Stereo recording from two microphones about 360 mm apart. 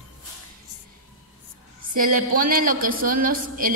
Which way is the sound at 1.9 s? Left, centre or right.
Right.